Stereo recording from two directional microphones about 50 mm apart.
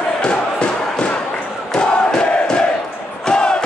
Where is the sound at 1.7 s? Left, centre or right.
Centre.